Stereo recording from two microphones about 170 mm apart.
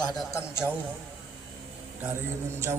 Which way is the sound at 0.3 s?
15° left (ahead or behind).